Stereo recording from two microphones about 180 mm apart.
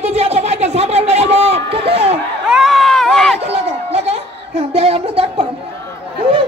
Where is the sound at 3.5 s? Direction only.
35° right (ahead or behind).